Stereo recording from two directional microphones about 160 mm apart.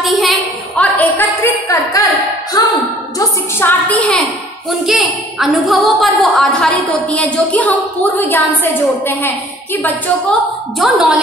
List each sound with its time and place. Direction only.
0.0 s a sound: centre (ahead or behind)
0.9 s a sound: 10° left (ahead or behind)
2.6 s speech: 25° left (ahead or behind)
3.2 s a woman's voice: 15° left (ahead or behind)
4.6 s a woman's voice: centre (ahead or behind)
10.8 s speech: centre (ahead or behind)